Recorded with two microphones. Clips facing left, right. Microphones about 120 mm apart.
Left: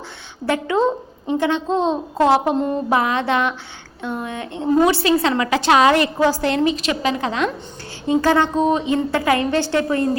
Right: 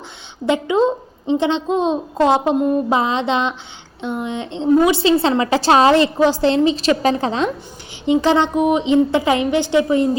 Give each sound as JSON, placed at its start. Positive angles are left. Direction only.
{"t": 0.4, "sound": "a woman's voice", "side_deg": -20}
{"t": 8.0, "sound": "a woman's voice", "side_deg": -20}